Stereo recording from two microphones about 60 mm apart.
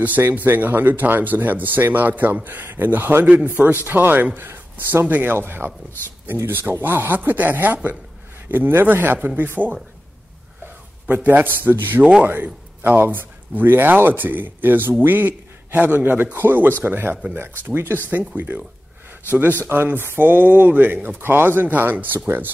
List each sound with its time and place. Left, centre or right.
0.2 s speech: right
9.6 s speech: centre
11.1 s speech: right
12.0 s speech: centre
12.8 s speech: right
18.1 s speech: right
19.7 s speech: right